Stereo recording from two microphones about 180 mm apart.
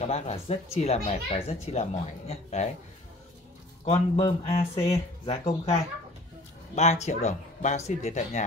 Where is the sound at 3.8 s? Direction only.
35° left (ahead or behind).